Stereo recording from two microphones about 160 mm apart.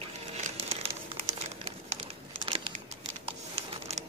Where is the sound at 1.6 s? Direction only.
35° right (ahead or behind).